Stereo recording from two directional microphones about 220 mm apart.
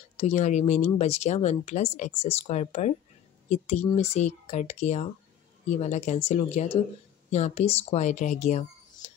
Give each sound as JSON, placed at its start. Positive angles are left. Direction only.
{"t": 0.2, "sound": "speech", "side_deg": 30}